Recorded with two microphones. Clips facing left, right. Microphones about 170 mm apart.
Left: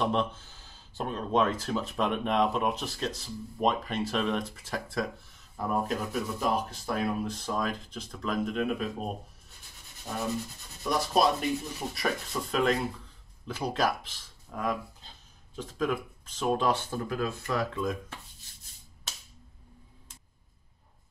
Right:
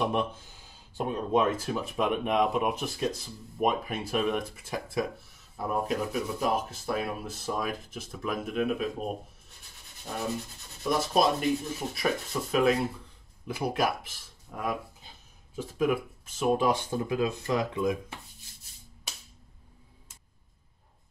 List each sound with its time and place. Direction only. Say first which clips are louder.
0.0 s speech: even; 10° right (ahead or behind)
10.8 s speech: right 1 dB; centre (ahead or behind); by 17.9 s 20° right (ahead or behind)
19.1 s a sound: even; 10° right (ahead or behind)